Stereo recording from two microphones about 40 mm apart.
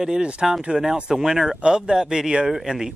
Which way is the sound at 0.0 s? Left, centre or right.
Centre.